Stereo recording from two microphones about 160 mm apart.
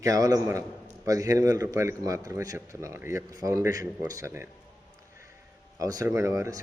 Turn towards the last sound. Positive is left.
turn(degrees=-20)  # may be behind; listen again after turning